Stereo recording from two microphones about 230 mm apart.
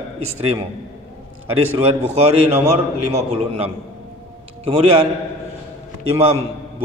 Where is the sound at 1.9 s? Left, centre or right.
Right.